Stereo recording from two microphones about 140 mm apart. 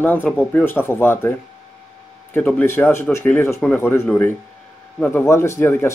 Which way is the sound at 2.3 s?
15° left (ahead or behind).